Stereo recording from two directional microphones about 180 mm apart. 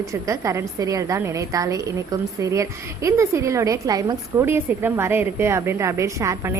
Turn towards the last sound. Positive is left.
turn(degrees=-15)  # may be behind; listen again after turning